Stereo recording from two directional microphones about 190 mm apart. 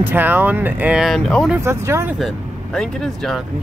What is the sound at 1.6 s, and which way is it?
Speech, 15° right (ahead or behind).